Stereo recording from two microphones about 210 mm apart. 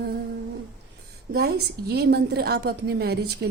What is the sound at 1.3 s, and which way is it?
A woman's voice, 50° right (ahead or behind).